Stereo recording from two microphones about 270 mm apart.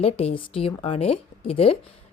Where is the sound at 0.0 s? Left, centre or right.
Left.